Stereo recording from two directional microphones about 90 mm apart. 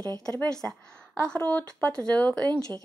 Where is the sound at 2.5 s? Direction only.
40° right (ahead or behind).